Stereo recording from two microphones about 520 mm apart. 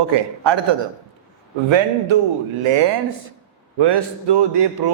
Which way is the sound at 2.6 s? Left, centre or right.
Right.